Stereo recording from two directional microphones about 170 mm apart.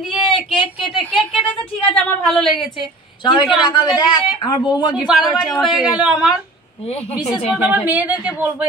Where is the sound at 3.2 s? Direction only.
25° left (ahead or behind).